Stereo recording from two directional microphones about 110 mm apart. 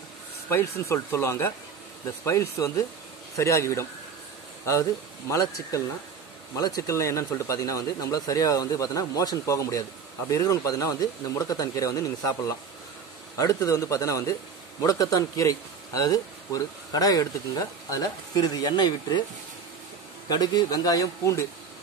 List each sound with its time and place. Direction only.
0.5 s speech: 20° left (ahead or behind)
5.3 s speech: 30° left (ahead or behind)
20.2 s speech: 35° left (ahead or behind)